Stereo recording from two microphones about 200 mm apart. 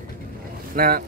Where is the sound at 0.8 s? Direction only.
45° right (ahead or behind).